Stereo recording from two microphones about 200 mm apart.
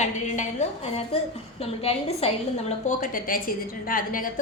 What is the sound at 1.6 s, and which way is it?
A woman's voice, 30° left (ahead or behind).